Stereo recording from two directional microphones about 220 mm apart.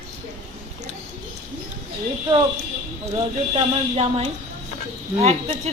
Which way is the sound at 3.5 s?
25° right (ahead or behind).